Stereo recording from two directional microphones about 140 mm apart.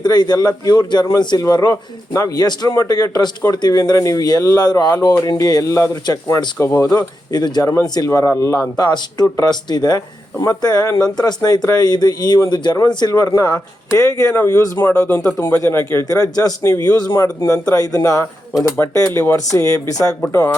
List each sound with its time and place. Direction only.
0.0 s a man's voice: 30° left (ahead or behind)
6.9 s a man's voice: 25° left (ahead or behind)
15.0 s a man's voice: 10° left (ahead or behind); by 20.5 s 25° left (ahead or behind)